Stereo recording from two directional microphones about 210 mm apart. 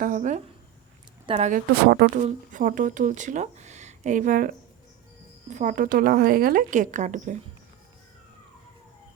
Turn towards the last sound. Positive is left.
turn(degrees=-35)  # may be behind; listen again after turning